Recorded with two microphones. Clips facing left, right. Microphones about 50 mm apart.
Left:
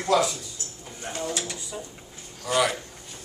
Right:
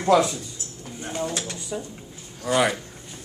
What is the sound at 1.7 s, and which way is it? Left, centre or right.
Speech, right.